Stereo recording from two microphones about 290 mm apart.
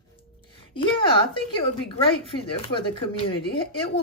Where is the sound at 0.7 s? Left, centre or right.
Centre.